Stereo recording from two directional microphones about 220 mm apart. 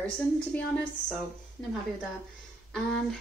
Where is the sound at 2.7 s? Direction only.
Centre (ahead or behind).